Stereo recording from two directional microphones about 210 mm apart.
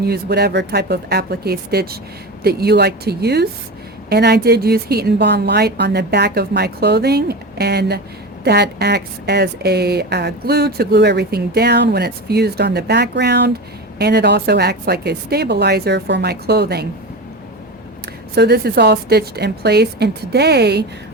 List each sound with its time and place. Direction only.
0.0 s speech: 50° right (ahead or behind)
18.3 s speech: 50° right (ahead or behind)